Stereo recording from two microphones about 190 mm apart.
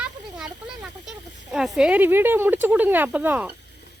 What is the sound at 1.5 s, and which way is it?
Speech, centre (ahead or behind).